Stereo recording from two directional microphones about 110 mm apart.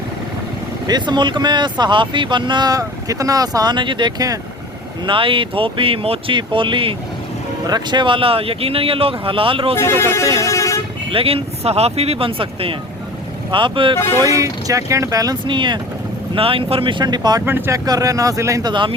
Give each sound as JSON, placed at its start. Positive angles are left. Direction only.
{"t": 0.9, "sound": "speech", "side_deg": -40}
{"t": 5.0, "sound": "speech", "side_deg": -50}
{"t": 9.7, "sound": "speech", "side_deg": 25}
{"t": 11.1, "sound": "speech", "side_deg": -60}
{"t": 14.3, "sound": "speech", "side_deg": -30}
{"t": 15.4, "sound": "speech", "side_deg": -45}
{"t": 17.4, "sound": "speech", "side_deg": -20}
{"t": 17.8, "sound": "speech", "side_deg": -35}
{"t": 18.7, "sound": "speech", "side_deg": -45}